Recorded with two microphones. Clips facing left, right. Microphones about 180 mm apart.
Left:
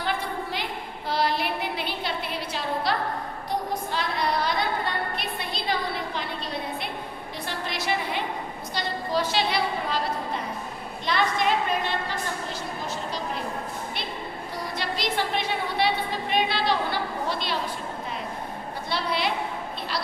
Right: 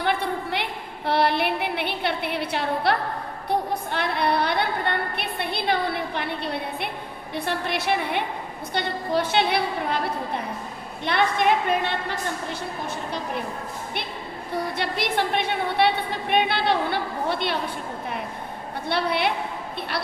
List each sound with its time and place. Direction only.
0.0 s a sound: 60° right (ahead or behind)
3.5 s a woman's voice: 60° right (ahead or behind)
14.5 s a woman's voice: 60° right (ahead or behind)
18.9 s a woman's voice: 60° right (ahead or behind)